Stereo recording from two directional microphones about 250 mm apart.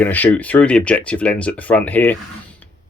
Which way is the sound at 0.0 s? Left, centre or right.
Centre.